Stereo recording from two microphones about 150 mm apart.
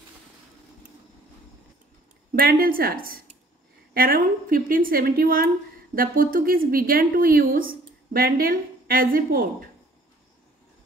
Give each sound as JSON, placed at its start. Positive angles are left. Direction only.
{"t": 2.3, "sound": "a woman's voice", "side_deg": -75}